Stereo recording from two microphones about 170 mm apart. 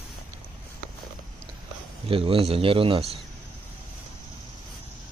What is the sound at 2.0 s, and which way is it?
Speech, 35° right (ahead or behind).